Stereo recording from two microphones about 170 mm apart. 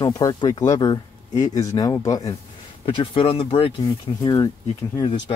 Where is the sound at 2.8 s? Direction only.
30° left (ahead or behind).